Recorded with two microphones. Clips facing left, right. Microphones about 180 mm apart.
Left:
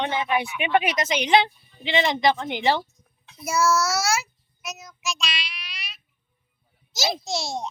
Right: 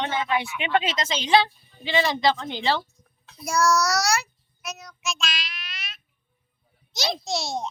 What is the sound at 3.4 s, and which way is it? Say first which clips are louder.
Child singing: even; 5° left (ahead or behind).